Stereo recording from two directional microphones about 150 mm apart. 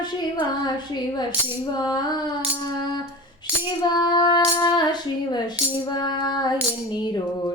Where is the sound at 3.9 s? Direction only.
30° left (ahead or behind).